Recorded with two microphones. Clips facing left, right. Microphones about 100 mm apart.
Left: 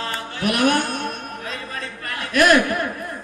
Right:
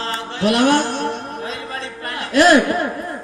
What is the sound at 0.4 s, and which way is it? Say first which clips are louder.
Speech: right 4 dB; 25° right (ahead or behind).